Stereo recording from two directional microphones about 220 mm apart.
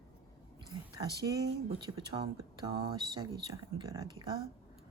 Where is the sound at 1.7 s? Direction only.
25° right (ahead or behind).